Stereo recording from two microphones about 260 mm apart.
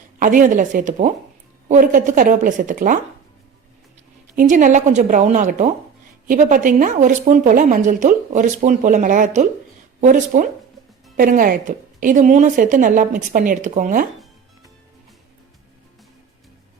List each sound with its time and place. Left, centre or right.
0.2 s speech: right
4.4 s speech: right